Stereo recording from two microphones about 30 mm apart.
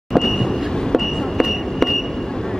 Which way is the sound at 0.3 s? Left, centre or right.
Centre.